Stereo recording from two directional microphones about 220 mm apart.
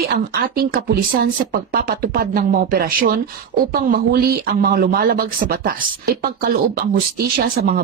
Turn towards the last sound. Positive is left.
turn(degrees=-40)  # may be behind; listen again after turning